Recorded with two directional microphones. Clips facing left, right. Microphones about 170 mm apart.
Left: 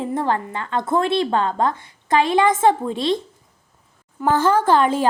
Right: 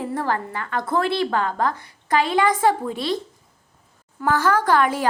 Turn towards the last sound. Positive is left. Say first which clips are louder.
# left 2 dB
turn(degrees=25)  # may be behind; listen again after turning